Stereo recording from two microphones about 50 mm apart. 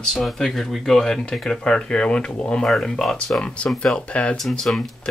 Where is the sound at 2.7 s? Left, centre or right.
Centre.